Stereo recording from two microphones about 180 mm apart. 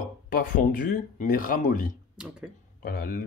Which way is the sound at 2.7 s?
55° left (ahead or behind).